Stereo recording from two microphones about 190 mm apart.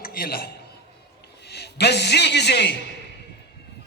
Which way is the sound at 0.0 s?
50° left (ahead or behind).